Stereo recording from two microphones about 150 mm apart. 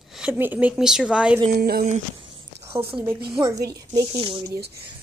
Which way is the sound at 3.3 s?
25° right (ahead or behind).